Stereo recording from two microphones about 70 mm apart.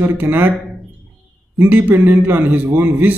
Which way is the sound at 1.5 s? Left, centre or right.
Right.